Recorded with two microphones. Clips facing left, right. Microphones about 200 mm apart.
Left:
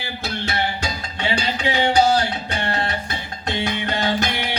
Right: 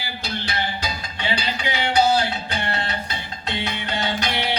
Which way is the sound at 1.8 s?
45° left (ahead or behind).